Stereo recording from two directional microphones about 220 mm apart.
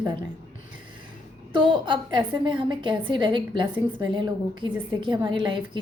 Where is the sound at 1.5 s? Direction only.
20° right (ahead or behind).